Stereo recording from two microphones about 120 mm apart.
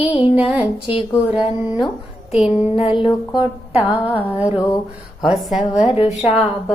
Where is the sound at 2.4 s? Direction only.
60° left (ahead or behind); by 3.5 s 40° left (ahead or behind).